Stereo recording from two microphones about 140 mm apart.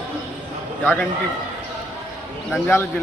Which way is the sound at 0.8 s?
10° left (ahead or behind).